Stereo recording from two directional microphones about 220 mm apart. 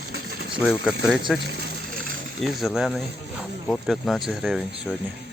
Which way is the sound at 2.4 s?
Centre (ahead or behind).